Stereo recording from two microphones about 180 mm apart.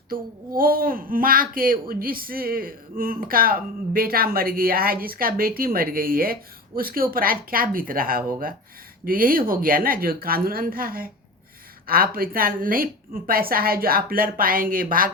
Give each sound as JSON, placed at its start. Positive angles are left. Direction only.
{"t": 0.1, "sound": "a child's voice", "side_deg": -50}